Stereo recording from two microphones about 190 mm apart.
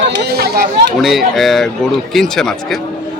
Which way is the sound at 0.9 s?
Centre (ahead or behind).